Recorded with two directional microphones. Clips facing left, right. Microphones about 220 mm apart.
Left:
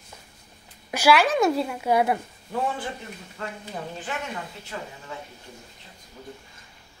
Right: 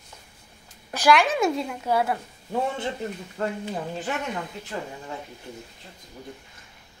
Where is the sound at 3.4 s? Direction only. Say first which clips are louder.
Right 7 dB; 40° right (ahead or behind).